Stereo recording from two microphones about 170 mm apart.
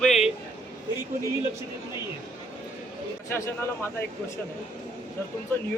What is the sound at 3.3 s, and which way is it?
Speech, 15° left (ahead or behind).